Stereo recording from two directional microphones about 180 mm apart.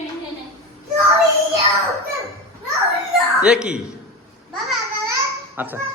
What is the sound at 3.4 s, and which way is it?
Speech, 5° right (ahead or behind).